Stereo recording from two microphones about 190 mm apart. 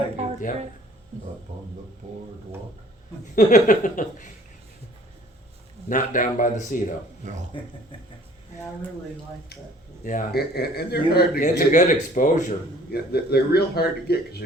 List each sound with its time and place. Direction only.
3.3 s a man's voice: 45° left (ahead or behind)
5.9 s a man's voice: 40° left (ahead or behind)
7.2 s speech: 40° right (ahead or behind)
10.0 s speech: 45° left (ahead or behind)
11.4 s a man's voice: 40° left (ahead or behind); by 14.4 s 55° left (ahead or behind)